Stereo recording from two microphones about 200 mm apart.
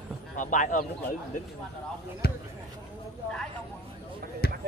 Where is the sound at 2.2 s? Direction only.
55° left (ahead or behind).